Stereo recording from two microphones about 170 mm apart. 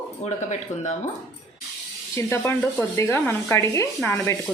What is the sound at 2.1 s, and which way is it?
Rub, 15° left (ahead or behind).